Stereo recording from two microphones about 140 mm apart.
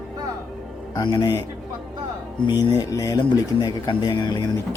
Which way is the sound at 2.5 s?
30° left (ahead or behind).